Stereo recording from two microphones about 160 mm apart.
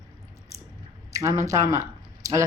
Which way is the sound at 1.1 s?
20° right (ahead or behind).